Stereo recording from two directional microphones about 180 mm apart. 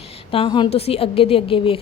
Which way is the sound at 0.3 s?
30° left (ahead or behind).